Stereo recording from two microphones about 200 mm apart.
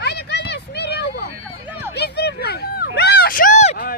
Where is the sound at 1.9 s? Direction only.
55° left (ahead or behind); by 3.8 s 35° left (ahead or behind).